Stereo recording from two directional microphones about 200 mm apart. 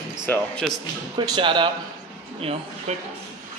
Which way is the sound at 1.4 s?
25° right (ahead or behind).